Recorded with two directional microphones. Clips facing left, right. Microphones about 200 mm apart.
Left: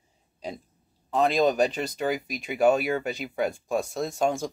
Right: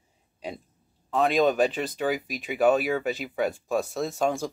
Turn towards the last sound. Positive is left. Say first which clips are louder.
# even
turn(degrees=0)  # may be behind; listen again after turning